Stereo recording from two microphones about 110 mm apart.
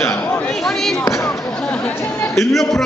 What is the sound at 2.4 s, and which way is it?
Speech, centre (ahead or behind).